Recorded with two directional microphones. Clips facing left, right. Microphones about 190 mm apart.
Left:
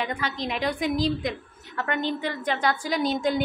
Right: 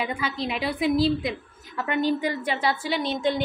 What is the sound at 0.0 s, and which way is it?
A woman's voice, 10° right (ahead or behind).